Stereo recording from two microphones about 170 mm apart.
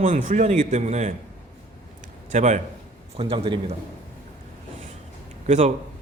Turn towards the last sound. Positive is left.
turn(degrees=-45)  # may be behind; listen again after turning